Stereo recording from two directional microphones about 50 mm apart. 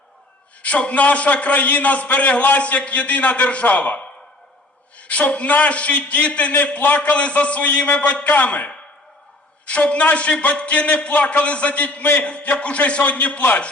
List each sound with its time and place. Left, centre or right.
0.6 s a man's voice: left